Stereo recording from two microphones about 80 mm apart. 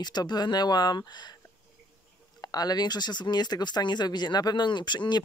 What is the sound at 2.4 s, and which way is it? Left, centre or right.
Speech, left.